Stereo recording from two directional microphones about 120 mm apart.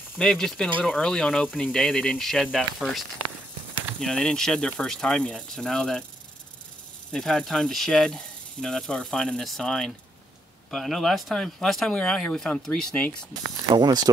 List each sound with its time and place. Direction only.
0.2 s speech: 5° left (ahead or behind)
7.1 s speech: 5° left (ahead or behind)
13.7 s speech: 35° right (ahead or behind)